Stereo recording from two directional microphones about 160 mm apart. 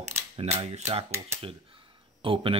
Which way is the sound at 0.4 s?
40° right (ahead or behind).